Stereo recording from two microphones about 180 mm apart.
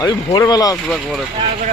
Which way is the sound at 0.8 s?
Centre (ahead or behind).